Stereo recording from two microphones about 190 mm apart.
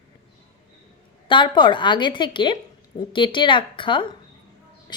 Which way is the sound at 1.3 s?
25° left (ahead or behind).